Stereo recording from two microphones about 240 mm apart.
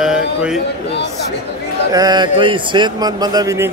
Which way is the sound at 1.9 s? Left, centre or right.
Centre.